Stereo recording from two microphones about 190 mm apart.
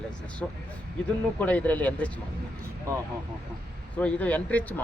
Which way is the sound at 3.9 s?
10° left (ahead or behind).